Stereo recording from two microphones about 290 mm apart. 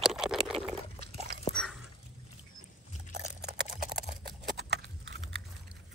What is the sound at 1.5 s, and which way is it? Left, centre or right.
Dog, centre.